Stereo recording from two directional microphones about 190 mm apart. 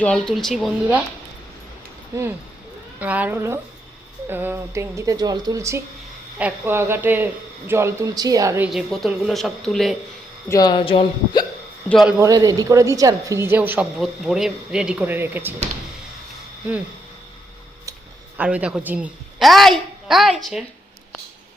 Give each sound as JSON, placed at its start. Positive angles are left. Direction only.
{"t": 0.0, "sound": "a woman's voice", "side_deg": 5}
{"t": 3.0, "sound": "a woman's voice", "side_deg": -10}
{"t": 10.5, "sound": "speech", "side_deg": 20}
{"t": 11.9, "sound": "a woman's voice", "side_deg": 0}
{"t": 12.2, "sound": "speech", "side_deg": -20}
{"t": 18.3, "sound": "a woman's voice", "side_deg": -5}